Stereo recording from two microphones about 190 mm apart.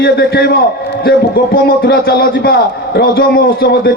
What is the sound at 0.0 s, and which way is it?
Speech, 55° left (ahead or behind).